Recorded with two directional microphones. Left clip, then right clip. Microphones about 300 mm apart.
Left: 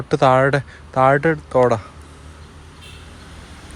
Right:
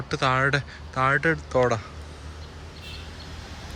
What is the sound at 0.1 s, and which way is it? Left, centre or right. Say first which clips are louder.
Speech: left 8 dB; centre.